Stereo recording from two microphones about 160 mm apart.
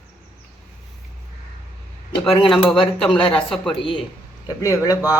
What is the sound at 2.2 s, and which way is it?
Speech, 35° left (ahead or behind).